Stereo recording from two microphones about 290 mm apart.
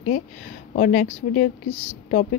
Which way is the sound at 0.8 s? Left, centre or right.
Left.